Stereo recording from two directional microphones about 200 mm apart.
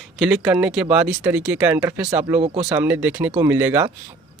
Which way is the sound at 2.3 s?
30° right (ahead or behind).